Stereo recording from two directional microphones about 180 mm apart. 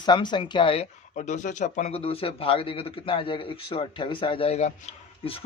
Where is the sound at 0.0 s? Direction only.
25° left (ahead or behind).